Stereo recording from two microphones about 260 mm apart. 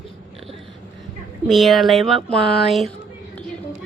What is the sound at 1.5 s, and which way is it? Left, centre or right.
Speech, centre.